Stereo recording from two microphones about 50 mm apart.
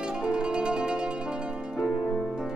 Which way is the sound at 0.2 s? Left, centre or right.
Centre.